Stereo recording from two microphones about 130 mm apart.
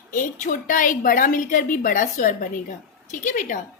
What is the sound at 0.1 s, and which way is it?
A woman's voice, 90° left.